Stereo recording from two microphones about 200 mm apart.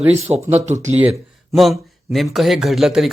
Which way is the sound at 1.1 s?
Centre (ahead or behind).